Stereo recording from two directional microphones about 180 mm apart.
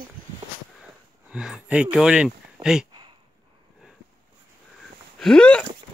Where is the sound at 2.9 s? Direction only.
25° right (ahead or behind).